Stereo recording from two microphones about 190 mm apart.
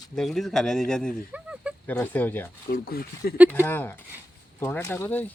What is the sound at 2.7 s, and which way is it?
Speech, 55° left (ahead or behind).